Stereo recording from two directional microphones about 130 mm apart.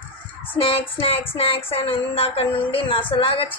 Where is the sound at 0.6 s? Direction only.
45° left (ahead or behind).